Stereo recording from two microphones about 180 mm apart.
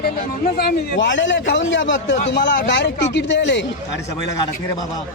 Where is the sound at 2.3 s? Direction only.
70° left (ahead or behind).